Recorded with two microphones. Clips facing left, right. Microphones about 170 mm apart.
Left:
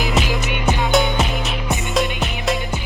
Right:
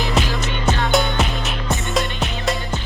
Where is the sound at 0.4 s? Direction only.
15° left (ahead or behind).